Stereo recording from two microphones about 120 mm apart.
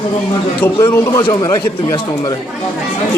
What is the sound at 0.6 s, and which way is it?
Speech, 25° left (ahead or behind).